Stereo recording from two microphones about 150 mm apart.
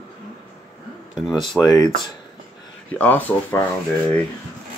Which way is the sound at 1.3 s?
Centre (ahead or behind).